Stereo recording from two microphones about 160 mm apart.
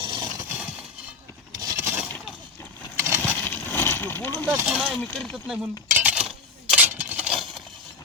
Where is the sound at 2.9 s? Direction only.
15° right (ahead or behind).